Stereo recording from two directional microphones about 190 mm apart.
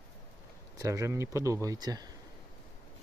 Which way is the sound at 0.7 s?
15° right (ahead or behind).